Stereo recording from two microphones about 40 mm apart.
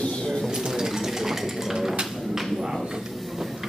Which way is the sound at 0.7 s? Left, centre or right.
Centre.